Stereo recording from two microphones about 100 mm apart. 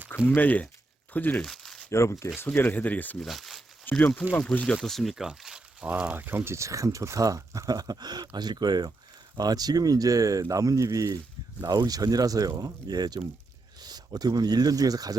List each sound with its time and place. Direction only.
0.3 s speech: 15° left (ahead or behind)
1.4 s crumpling: 5° left (ahead or behind)
1.9 s speech: 30° left (ahead or behind)
3.2 s speech: centre (ahead or behind)
3.9 s speech: 10° left (ahead or behind)
4.8 s speech: centre (ahead or behind); by 15.1 s 40° right (ahead or behind)